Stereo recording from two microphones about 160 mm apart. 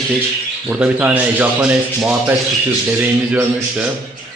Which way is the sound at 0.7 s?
5° right (ahead or behind).